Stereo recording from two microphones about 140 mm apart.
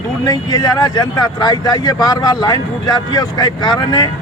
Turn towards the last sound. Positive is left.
turn(degrees=30)  # may be behind; listen again after turning